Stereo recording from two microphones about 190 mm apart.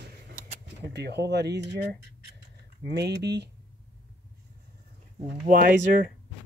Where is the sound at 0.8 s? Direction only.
65° right (ahead or behind).